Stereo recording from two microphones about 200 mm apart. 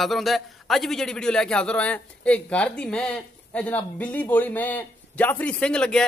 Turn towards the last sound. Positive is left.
turn(degrees=5)  # may be behind; listen again after turning